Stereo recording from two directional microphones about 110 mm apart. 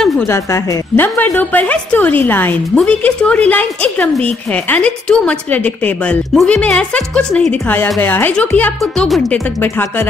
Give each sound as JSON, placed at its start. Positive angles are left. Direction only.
{"t": 0.3, "sound": "a woman's voice", "side_deg": 20}
{"t": 9.0, "sound": "speech", "side_deg": 5}
{"t": 9.6, "sound": "a woman's voice", "side_deg": 20}